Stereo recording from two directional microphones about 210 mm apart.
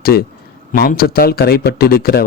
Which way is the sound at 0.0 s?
45° left (ahead or behind).